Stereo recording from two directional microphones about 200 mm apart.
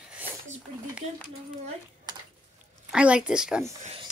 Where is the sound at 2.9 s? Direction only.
5° right (ahead or behind).